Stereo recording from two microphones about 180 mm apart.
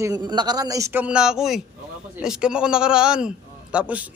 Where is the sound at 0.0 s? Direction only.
20° right (ahead or behind).